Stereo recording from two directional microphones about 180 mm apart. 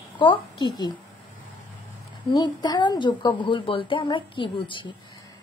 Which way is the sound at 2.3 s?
25° left (ahead or behind).